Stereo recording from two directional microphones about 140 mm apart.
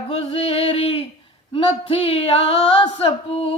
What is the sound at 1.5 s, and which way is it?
Music, 40° left (ahead or behind).